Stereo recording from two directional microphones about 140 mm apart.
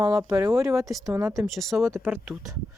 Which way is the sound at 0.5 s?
5° right (ahead or behind).